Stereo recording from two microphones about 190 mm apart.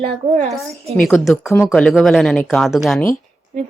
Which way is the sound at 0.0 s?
35° right (ahead or behind).